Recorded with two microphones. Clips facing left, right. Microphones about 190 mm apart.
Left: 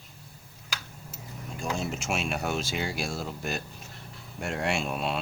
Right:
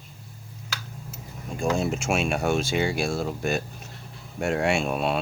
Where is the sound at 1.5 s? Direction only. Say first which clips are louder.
Right 7 dB; 50° right (ahead or behind).